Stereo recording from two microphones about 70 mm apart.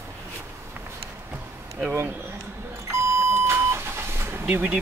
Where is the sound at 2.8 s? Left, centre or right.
Right.